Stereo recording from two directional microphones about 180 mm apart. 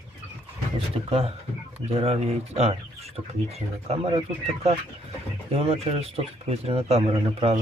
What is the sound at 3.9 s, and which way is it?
Speech, 35° right (ahead or behind).